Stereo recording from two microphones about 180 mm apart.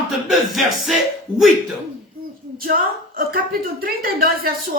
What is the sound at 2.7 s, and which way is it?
Speech, 50° right (ahead or behind).